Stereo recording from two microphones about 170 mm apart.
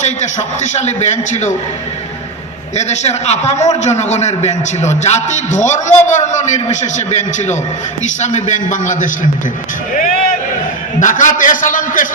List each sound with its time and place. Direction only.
0.0 s a man's voice: 45° left (ahead or behind)
2.7 s a man's voice: 40° left (ahead or behind)
11.0 s a man's voice: 50° left (ahead or behind)